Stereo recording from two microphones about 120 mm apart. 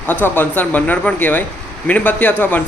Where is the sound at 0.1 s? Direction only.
15° left (ahead or behind).